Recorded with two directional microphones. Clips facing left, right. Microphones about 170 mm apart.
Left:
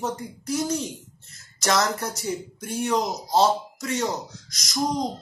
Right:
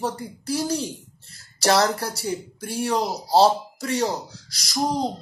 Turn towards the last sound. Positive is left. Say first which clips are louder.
# right 1 dB
turn(degrees=-30)  # may be behind; listen again after turning